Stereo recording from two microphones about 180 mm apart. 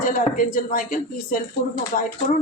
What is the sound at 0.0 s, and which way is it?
A woman's voice, 50° left (ahead or behind).